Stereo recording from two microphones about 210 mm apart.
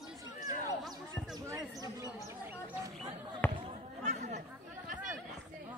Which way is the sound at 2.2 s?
15° right (ahead or behind).